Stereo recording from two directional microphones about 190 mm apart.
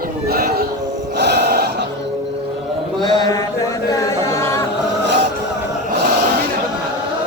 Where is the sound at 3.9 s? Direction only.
15° left (ahead or behind).